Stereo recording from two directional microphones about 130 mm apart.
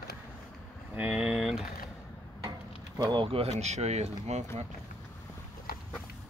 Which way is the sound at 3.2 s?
50° right (ahead or behind).